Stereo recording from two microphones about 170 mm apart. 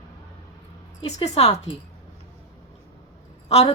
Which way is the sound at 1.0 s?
40° left (ahead or behind).